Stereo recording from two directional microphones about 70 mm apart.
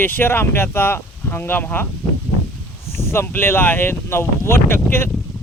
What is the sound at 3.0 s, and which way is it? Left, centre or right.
Speech, left.